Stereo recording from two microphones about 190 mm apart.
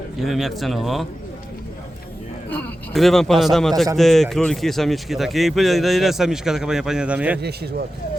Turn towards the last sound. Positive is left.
turn(degrees=-60)  # may be behind; listen again after turning